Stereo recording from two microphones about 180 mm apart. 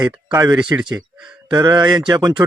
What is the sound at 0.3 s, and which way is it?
Speech, 20° right (ahead or behind).